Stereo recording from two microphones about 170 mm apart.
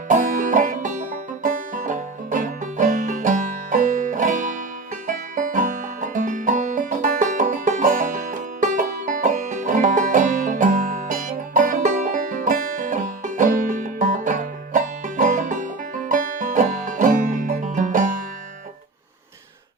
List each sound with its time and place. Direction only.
0.1 s music: 50° right (ahead or behind)